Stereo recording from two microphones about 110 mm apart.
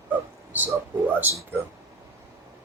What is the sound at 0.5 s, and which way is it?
Speech, 15° right (ahead or behind).